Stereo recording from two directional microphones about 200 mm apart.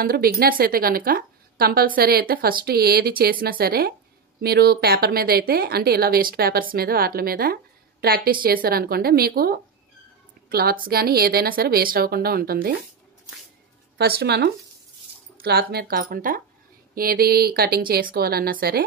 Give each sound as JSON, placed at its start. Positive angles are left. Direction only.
{"t": 0.0, "sound": "a woman's voice", "side_deg": -45}
{"t": 13.9, "sound": "a woman's voice", "side_deg": -55}